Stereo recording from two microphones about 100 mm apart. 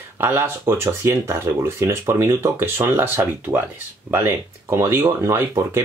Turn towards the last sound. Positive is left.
turn(degrees=-25)  # may be behind; listen again after turning